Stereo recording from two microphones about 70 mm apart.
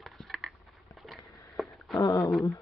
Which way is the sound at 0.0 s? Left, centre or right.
Centre.